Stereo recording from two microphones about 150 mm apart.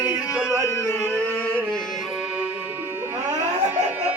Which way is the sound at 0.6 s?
15° left (ahead or behind).